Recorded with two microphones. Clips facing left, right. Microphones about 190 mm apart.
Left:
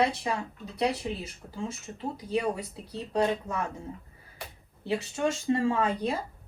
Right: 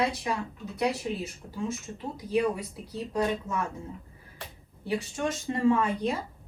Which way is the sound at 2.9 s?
30° left (ahead or behind).